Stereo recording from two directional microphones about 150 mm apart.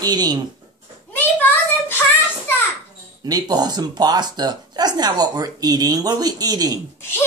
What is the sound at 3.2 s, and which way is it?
Speech, 25° right (ahead or behind).